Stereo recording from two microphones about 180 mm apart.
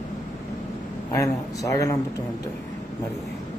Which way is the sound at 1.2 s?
20° left (ahead or behind).